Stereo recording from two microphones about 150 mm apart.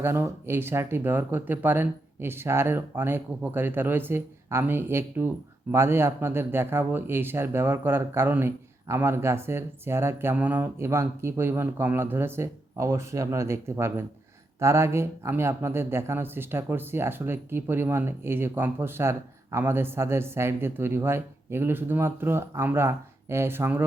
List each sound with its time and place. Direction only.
0.0 s speech: 15° right (ahead or behind)